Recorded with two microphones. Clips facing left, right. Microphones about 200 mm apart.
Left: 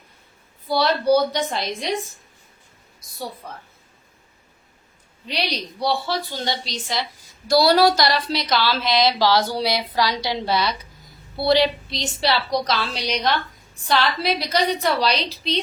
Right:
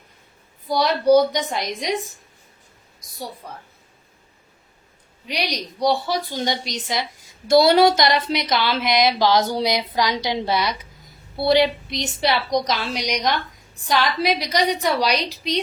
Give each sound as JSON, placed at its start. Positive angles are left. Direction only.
{"t": 0.7, "sound": "a woman's voice", "side_deg": -15}
{"t": 5.3, "sound": "a woman's voice", "side_deg": -15}